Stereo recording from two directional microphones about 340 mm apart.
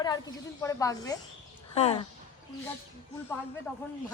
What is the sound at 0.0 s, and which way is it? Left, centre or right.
A woman's voice, centre.